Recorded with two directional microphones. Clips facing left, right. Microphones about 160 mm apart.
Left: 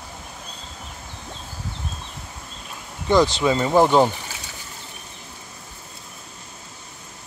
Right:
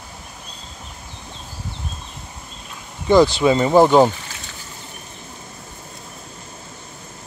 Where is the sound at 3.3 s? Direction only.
15° right (ahead or behind).